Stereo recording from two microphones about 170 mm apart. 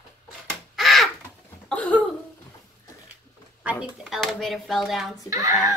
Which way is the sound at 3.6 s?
5° right (ahead or behind).